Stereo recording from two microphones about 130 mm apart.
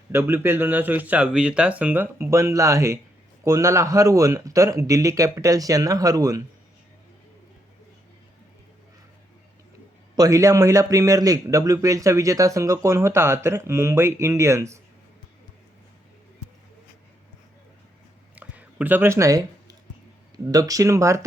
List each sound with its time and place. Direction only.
0.1 s a man's voice: 20° right (ahead or behind)
10.2 s a man's voice: 25° right (ahead or behind)
18.3 s a sound: 10° right (ahead or behind); by 19.7 s 25° right (ahead or behind)
20.3 s a man's voice: 25° right (ahead or behind)